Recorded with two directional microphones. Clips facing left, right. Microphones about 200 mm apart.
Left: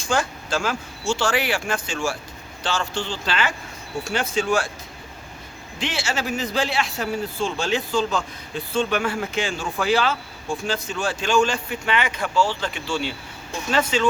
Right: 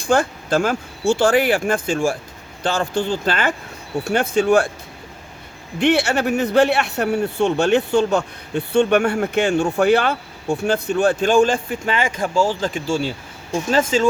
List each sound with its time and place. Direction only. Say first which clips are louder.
0.1 s speech: right 6 dB; 55° right (ahead or behind)
5.8 s speech: right 10 dB; 60° right (ahead or behind); by 14.1 s 40° right (ahead or behind)